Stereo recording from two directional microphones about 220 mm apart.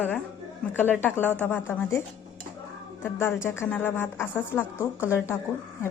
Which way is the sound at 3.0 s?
10° left (ahead or behind).